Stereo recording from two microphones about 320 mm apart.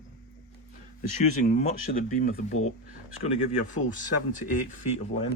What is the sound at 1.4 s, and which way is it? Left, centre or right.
Speech, left.